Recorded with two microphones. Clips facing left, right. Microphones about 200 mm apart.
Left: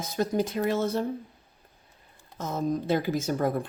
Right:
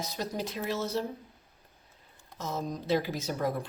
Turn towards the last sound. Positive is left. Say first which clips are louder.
# left 5 dB
turn(degrees=50)  # may be behind; listen again after turning